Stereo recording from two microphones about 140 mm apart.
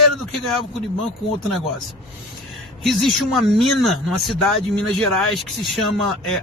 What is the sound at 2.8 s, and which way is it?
Speech, centre (ahead or behind).